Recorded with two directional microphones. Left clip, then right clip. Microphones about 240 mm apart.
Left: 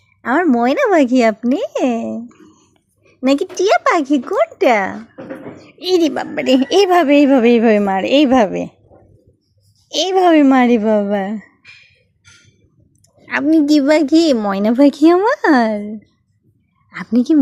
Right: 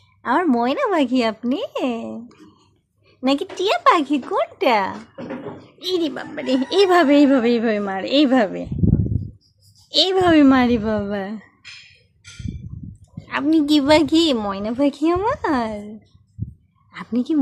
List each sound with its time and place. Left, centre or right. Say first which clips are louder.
0.2 s a woman's voice: left 4 dB; centre
5.8 s a woman's voice: left 8 dB; left
9.9 s a woman's voice: left 3 dB; left
13.2 s speech: left 5 dB; centre
14.5 s a woman's voice: left 8 dB; left
16.9 s a woman's voice: left 7 dB; left